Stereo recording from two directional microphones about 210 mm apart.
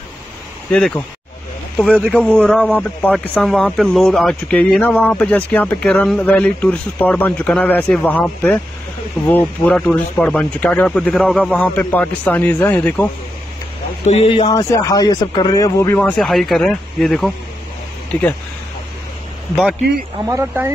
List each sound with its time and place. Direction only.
0.7 s a man's voice: 5° left (ahead or behind)
14.0 s speech: 30° left (ahead or behind)
14.5 s speech: 15° left (ahead or behind)
20.2 s speech: 10° right (ahead or behind)